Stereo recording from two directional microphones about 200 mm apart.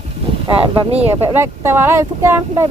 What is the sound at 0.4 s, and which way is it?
Speech, 25° right (ahead or behind).